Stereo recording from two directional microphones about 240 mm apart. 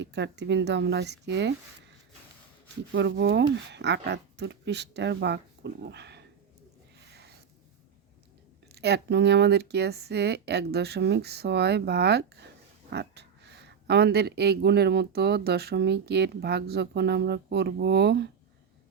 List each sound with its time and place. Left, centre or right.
0.0 s speech: right
2.9 s speech: right
7.1 s a sound: right
8.7 s speech: right